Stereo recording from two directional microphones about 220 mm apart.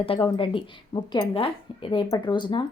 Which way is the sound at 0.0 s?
25° left (ahead or behind).